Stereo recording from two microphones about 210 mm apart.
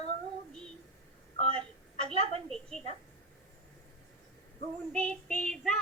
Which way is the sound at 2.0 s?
25° right (ahead or behind).